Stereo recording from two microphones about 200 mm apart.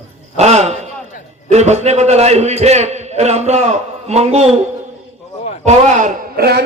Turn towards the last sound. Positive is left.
turn(degrees=-50)  # may be behind; listen again after turning